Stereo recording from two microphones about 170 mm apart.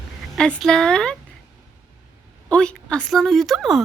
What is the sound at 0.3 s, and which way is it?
Speech, 5° left (ahead or behind).